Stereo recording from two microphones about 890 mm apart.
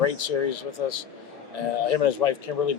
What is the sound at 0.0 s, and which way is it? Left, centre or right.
Speech, left.